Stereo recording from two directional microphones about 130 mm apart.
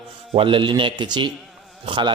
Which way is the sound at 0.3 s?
40° right (ahead or behind).